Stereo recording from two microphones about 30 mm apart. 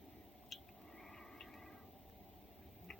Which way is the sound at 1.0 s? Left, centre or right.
Centre.